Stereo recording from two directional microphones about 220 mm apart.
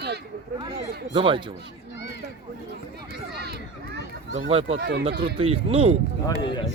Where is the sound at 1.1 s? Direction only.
20° right (ahead or behind).